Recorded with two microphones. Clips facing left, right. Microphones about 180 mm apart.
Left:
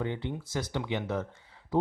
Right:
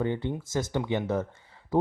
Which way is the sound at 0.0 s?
45° right (ahead or behind).